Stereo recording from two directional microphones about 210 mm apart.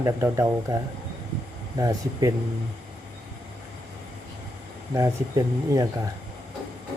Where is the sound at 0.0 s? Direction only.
15° right (ahead or behind).